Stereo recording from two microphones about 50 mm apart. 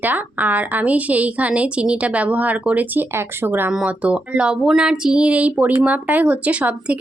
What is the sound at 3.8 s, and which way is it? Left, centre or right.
Speech, right.